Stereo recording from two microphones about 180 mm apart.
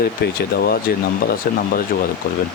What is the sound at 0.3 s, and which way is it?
Speech, 60° left (ahead or behind).